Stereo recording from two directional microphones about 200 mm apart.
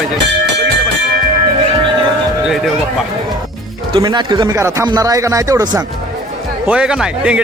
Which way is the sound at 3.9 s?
20° right (ahead or behind).